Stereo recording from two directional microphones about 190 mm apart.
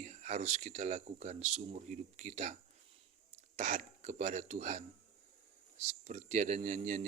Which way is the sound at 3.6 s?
40° right (ahead or behind).